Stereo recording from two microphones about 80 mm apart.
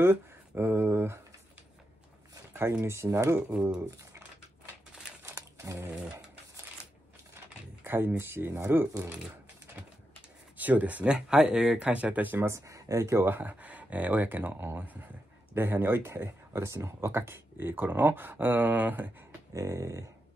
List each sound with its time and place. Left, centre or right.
0.0 s speech: right
2.8 s speech: right
5.2 s crumpling: right
7.3 s a sound: right
8.2 s speech: right
10.6 s speech: centre
12.4 s speech: right
13.3 s speech: right
19.5 s a sound: right